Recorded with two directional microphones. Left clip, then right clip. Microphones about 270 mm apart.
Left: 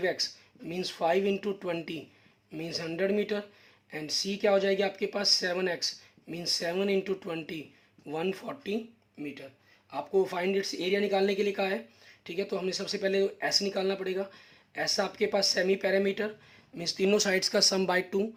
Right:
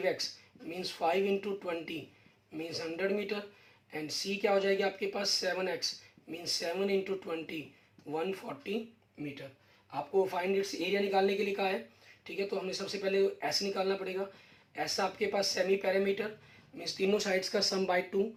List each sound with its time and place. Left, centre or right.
0.7 s speech: left
9.9 s speech: left